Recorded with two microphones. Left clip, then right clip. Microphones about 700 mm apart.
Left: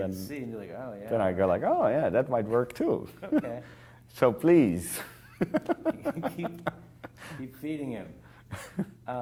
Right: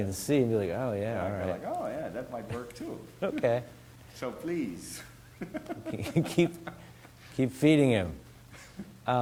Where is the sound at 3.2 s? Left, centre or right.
Right.